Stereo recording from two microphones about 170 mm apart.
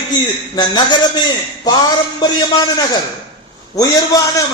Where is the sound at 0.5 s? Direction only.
25° left (ahead or behind).